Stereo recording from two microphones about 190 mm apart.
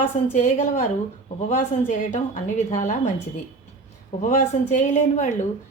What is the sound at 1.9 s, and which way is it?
Speech, 40° left (ahead or behind).